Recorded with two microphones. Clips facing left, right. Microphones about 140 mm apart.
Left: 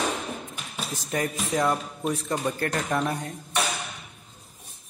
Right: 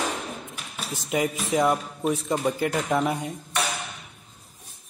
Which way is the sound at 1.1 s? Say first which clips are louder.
Right 3 dB; 10° right (ahead or behind).